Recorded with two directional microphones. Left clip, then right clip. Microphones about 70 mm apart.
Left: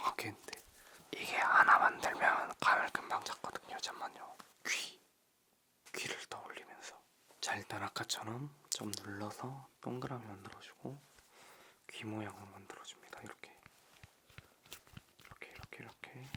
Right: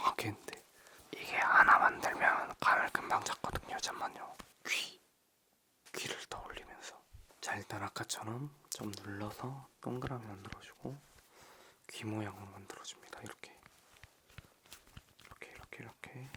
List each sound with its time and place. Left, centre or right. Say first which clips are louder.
0.0 s whispering: right 4 dB; right
1.1 s whispering: right 2 dB; centre
3.0 s whispering: right 5 dB; right
4.6 s a sound: right 2 dB; centre
5.9 s whispering: right 1 dB; centre
9.4 s speech: right 1 dB; centre
11.3 s a sound: right 1 dB; right
12.5 s whispering: right 2 dB; right
13.7 s walk: right 1 dB; centre
15.4 s whispering: right 1 dB; right